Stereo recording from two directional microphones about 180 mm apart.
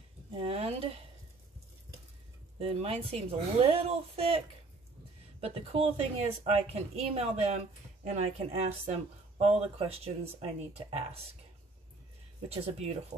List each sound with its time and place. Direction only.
0.4 s a sound: 35° right (ahead or behind)
2.6 s speech: 35° right (ahead or behind)
5.4 s speech: 30° right (ahead or behind)
12.4 s speech: 35° right (ahead or behind)